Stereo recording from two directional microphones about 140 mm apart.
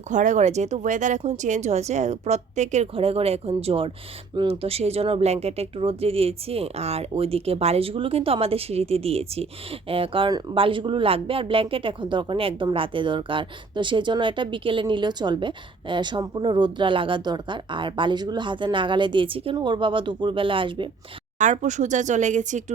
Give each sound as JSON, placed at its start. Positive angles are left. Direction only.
{"t": 0.1, "sound": "speech", "side_deg": -60}
{"t": 21.3, "sound": "speech", "side_deg": -60}